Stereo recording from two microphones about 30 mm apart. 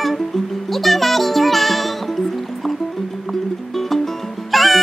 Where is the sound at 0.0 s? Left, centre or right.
Centre.